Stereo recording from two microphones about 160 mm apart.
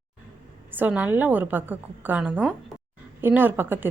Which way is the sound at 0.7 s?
10° right (ahead or behind).